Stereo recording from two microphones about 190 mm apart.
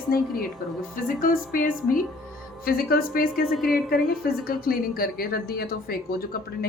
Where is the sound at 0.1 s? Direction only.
50° left (ahead or behind).